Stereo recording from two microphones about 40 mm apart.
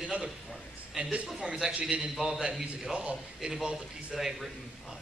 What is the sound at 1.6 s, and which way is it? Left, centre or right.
A man's voice, centre.